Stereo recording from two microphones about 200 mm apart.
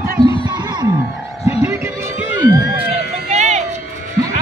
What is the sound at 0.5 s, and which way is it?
Music, 20° right (ahead or behind).